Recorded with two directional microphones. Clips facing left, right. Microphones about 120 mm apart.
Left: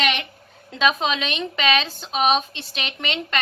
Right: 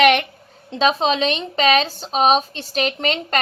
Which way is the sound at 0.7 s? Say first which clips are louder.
Right 4 dB; 30° right (ahead or behind).